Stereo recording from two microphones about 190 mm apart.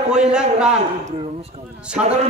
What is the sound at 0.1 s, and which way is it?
Speech, 5° right (ahead or behind).